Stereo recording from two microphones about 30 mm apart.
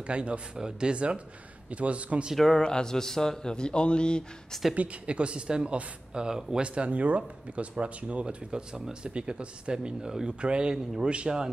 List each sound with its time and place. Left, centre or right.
0.0 s speech: right
0.6 s speech: right
0.9 s speech: right
2.5 s mantra: left
3.5 s a man's voice: left
5.0 s speech: right
6.6 s speech: right
8.5 s speech: right